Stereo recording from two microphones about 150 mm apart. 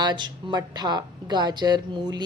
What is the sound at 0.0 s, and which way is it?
A woman's voice, 30° right (ahead or behind).